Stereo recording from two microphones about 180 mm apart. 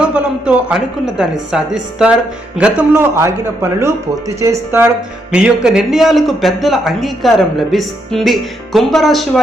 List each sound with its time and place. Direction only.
0.0 s a man's voice: 5° right (ahead or behind)